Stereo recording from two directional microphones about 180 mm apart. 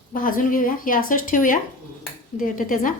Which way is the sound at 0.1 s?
50° left (ahead or behind).